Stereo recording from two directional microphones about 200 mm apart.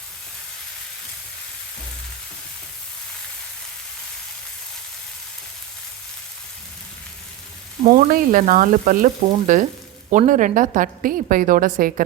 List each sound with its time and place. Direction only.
7.9 s frying: 40° right (ahead or behind)
9.5 s a woman's voice: 40° right (ahead or behind)